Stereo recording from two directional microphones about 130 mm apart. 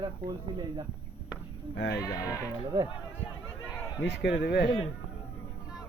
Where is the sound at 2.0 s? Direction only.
25° left (ahead or behind).